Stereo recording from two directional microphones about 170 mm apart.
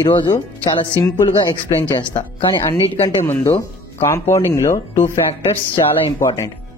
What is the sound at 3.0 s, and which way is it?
Speech, 15° left (ahead or behind).